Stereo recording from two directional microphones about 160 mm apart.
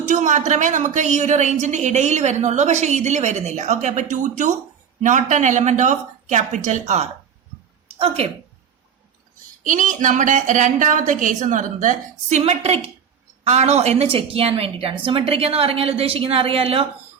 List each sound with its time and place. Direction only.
0.1 s a woman's voice: 50° right (ahead or behind)
9.6 s a woman's voice: 50° right (ahead or behind)
12.4 s a woman's voice: 40° right (ahead or behind)